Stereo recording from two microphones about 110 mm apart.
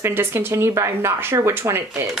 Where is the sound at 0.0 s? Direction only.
20° right (ahead or behind).